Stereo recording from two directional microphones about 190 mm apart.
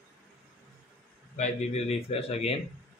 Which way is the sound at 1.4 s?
35° left (ahead or behind).